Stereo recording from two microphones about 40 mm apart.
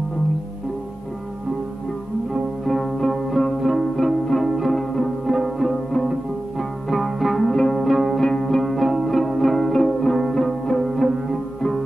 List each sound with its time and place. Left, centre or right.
2.6 s music: centre
4.7 s music: centre
5.2 s music: centre
6.9 s music: centre
7.4 s music: centre
7.8 s music: centre
8.2 s music: centre
8.6 s music: centre